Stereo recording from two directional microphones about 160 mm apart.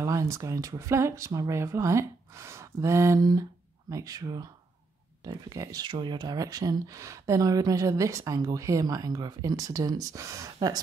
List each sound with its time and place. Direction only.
0.0 s speech: 20° right (ahead or behind)